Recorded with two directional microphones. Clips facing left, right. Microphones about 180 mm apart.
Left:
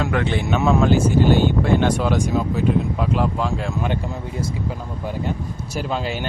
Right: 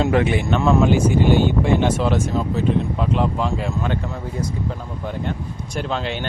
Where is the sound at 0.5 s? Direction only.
Centre (ahead or behind).